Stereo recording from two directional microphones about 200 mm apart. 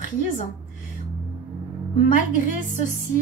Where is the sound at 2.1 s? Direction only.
40° left (ahead or behind).